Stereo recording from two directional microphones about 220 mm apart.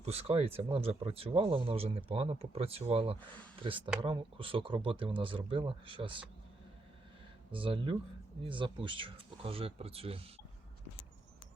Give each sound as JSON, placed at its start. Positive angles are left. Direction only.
{"t": 0.0, "sound": "speech", "side_deg": -30}
{"t": 7.5, "sound": "speech", "side_deg": -25}